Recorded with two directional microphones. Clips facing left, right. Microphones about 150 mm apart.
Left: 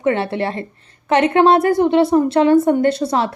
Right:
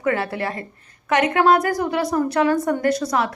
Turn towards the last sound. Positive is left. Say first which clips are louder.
# left 3 dB
turn(degrees=30)  # may be behind; listen again after turning